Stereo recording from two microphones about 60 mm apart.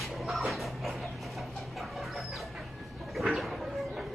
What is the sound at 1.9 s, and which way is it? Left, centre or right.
Chicken, centre.